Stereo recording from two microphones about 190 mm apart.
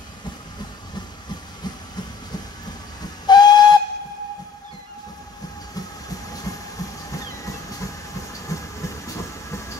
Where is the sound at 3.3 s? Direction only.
20° left (ahead or behind).